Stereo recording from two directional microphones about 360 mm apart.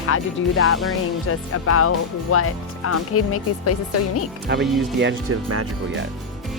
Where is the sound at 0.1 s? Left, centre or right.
Left.